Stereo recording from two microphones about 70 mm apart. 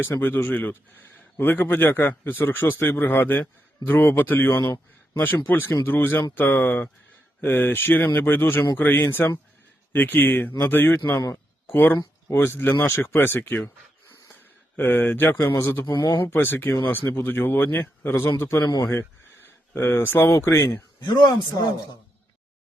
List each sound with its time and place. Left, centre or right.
0.1 s speech: left
11.3 s a sound: left
12.3 s speech: left
14.8 s speech: left
21.0 s speech: left